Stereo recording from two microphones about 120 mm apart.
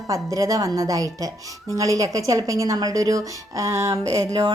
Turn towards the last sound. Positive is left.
turn(degrees=-25)  # may be behind; listen again after turning